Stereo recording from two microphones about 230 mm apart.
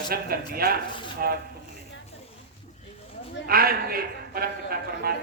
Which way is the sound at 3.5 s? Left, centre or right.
Right.